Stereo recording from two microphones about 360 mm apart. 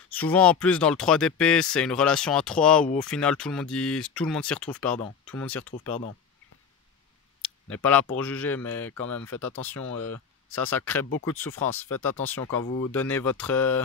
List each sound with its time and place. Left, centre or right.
0.1 s speech: centre
7.8 s speech: centre
11.1 s speech: left
11.3 s speech: centre